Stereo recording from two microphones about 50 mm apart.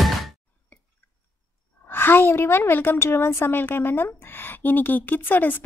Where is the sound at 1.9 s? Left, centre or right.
Left.